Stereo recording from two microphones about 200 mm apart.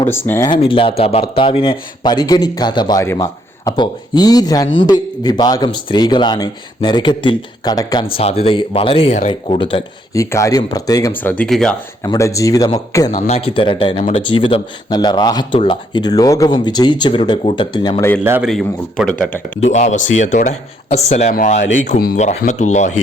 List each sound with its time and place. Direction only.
0.0 s speech: 10° left (ahead or behind)
0.6 s a man's voice: 25° left (ahead or behind)
10.2 s speech: 15° left (ahead or behind)
12.0 s speech: 15° left (ahead or behind)
13.1 s a man's voice: 35° left (ahead or behind)
18.2 s a man's voice: 10° right (ahead or behind)
18.5 s speech: 5° left (ahead or behind)
19.6 s speech: 35° left (ahead or behind)